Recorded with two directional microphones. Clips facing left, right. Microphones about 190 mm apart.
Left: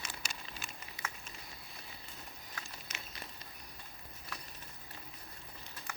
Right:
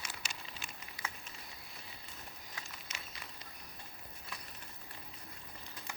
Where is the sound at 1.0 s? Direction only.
25° left (ahead or behind).